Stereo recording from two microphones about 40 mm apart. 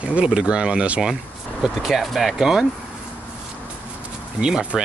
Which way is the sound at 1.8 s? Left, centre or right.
Centre.